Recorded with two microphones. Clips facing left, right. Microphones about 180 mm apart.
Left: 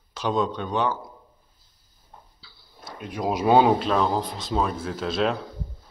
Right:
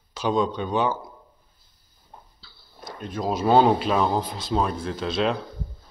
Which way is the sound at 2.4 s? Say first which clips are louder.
Even; 10° left (ahead or behind).